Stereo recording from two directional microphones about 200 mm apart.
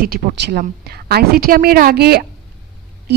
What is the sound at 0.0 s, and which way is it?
A woman's voice, 50° right (ahead or behind).